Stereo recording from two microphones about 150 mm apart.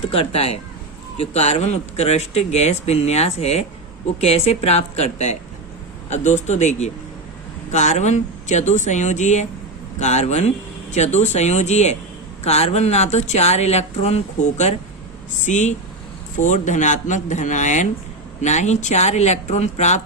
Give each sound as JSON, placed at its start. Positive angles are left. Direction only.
{"t": 0.1, "sound": "speech", "side_deg": 40}
{"t": 15.4, "sound": "a man's voice", "side_deg": 50}